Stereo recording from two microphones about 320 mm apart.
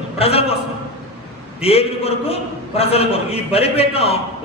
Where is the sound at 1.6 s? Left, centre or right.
Centre.